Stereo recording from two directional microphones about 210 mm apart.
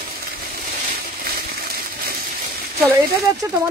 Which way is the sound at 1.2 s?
45° right (ahead or behind).